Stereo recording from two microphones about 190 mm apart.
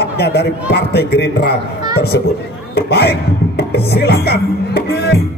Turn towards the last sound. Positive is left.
turn(degrees=55)  # may be behind; listen again after turning